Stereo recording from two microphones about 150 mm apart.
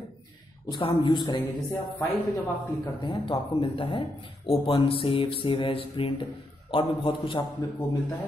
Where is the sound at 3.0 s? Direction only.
35° left (ahead or behind).